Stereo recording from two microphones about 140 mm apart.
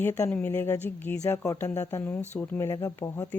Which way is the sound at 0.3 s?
15° left (ahead or behind).